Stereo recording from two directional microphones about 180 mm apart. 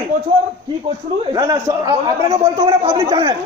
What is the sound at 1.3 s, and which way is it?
A man's voice, 20° right (ahead or behind).